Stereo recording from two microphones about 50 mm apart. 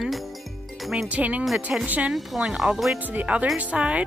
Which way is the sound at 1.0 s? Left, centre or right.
Right.